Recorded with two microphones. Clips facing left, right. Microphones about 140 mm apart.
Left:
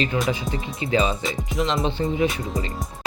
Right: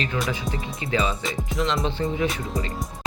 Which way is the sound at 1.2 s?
Centre (ahead or behind).